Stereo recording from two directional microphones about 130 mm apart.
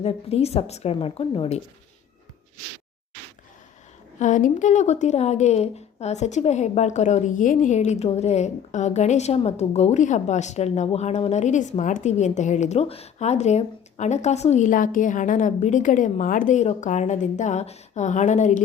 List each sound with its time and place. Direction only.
0.0 s a woman's voice: 50° left (ahead or behind)
4.2 s a woman's voice: 80° left